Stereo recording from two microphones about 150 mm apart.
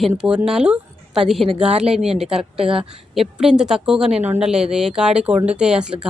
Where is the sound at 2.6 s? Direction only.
40° right (ahead or behind).